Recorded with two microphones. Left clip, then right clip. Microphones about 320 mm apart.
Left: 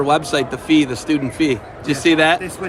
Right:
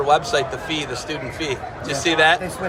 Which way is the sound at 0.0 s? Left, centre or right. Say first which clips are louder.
Left 1 dB; left.